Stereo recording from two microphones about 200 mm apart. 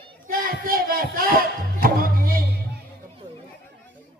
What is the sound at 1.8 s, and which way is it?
Music, 45° right (ahead or behind).